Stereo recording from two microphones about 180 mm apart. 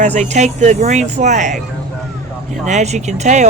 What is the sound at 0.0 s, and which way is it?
Speech, 40° right (ahead or behind).